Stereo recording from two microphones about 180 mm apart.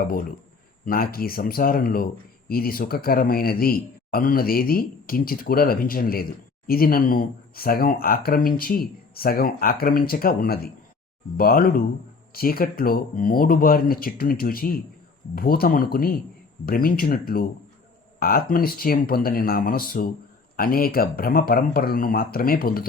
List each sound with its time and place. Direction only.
0.0 s speech: 50° left (ahead or behind)